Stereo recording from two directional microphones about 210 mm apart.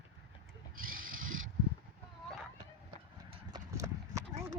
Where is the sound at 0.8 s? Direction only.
40° right (ahead or behind).